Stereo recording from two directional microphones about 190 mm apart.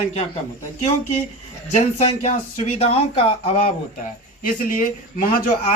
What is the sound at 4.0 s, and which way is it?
Speech, 45° left (ahead or behind).